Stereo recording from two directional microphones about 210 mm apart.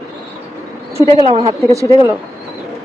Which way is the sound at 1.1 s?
30° right (ahead or behind).